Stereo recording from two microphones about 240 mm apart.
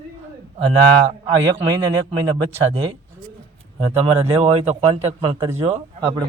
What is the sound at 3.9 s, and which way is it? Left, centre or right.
Speech, right.